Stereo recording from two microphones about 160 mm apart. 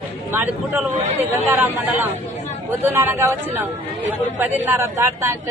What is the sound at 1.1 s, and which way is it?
Speech, 15° right (ahead or behind).